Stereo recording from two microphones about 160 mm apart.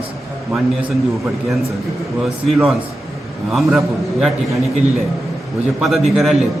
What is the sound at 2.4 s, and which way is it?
Speech, centre (ahead or behind).